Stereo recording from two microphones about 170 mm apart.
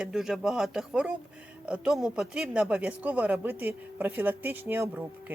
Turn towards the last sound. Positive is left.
turn(degrees=-10)  # may be behind; listen again after turning